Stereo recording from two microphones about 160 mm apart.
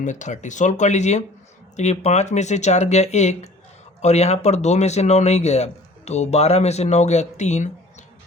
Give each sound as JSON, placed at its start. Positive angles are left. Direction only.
{"t": 0.0, "sound": "speech", "side_deg": 50}